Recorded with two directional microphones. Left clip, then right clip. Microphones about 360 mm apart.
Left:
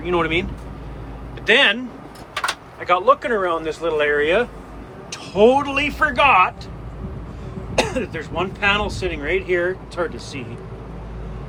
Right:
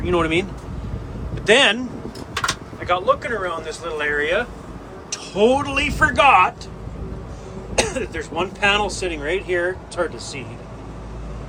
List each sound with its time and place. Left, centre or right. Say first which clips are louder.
0.0 s speech: even; centre
1.5 s speech: even; centre
2.8 s speech: left 3 dB; centre
7.8 s speech: left 1 dB; centre